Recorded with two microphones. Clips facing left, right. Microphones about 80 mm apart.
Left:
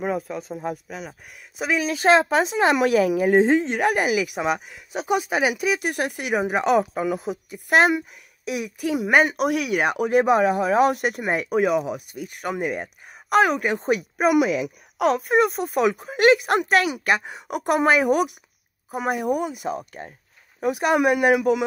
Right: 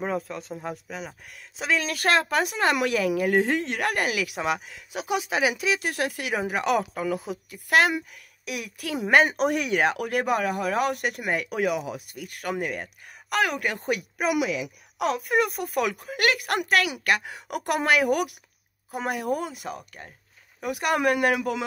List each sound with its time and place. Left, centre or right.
0.0 s speech: centre
5.5 s speech: centre; by 15.3 s left
15.3 s speech: left